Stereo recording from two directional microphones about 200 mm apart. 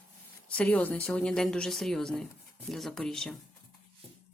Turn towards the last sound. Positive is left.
turn(degrees=5)  # may be behind; listen again after turning